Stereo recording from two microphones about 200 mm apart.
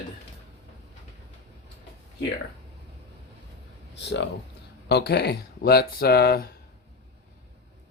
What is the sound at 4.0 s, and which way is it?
Speech, 60° left (ahead or behind).